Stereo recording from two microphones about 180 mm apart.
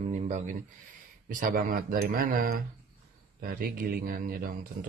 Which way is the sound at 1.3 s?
50° right (ahead or behind).